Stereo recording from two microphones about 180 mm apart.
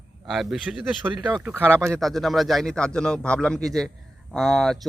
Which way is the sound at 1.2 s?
20° right (ahead or behind).